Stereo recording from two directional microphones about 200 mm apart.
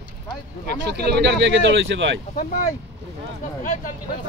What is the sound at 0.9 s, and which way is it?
Speech, 55° right (ahead or behind).